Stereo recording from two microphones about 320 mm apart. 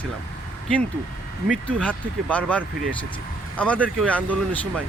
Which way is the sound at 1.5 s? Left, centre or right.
Centre.